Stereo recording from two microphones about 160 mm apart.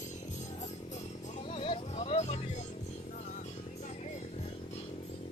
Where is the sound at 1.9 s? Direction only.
45° left (ahead or behind).